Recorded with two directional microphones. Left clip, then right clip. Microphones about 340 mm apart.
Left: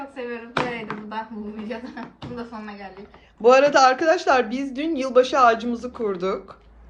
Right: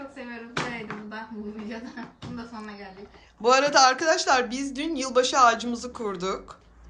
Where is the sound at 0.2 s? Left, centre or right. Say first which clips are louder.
Left 7 dB; centre.